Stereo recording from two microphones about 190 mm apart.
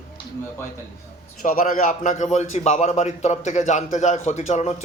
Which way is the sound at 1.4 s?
50° left (ahead or behind).